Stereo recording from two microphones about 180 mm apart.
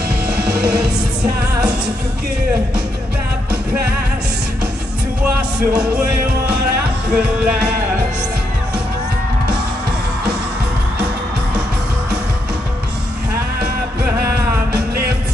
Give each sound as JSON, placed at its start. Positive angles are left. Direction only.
{"t": 0.3, "sound": "music", "side_deg": -5}
{"t": 5.8, "sound": "music", "side_deg": -5}
{"t": 14.7, "sound": "music", "side_deg": -60}